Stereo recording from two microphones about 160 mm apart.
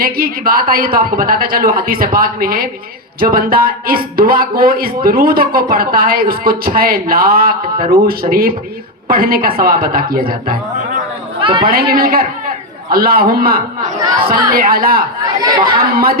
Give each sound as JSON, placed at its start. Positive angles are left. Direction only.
{"t": 0.0, "sound": "speech", "side_deg": -65}
{"t": 11.3, "sound": "chatter", "side_deg": -30}
{"t": 11.6, "sound": "speech", "side_deg": -65}
{"t": 15.4, "sound": "speech", "side_deg": -25}